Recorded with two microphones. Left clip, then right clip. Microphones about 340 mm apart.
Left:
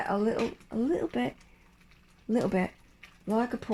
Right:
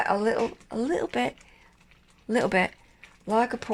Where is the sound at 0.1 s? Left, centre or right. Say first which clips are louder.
Right 4 dB; right.